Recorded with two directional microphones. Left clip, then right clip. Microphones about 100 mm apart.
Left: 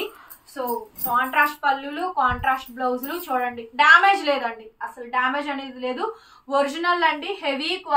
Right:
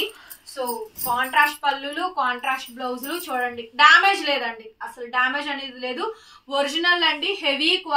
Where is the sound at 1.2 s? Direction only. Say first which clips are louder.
Right 3 dB; 15° left (ahead or behind).